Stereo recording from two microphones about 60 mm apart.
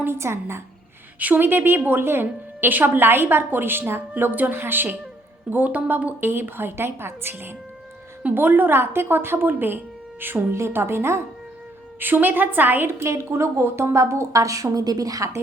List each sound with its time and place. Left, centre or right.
0.0 s a woman's voice: right
1.2 s a woman's voice: right
8.2 s a woman's voice: right
11.9 s a woman's voice: right